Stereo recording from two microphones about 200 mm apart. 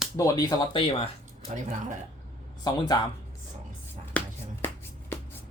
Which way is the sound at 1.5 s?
35° right (ahead or behind).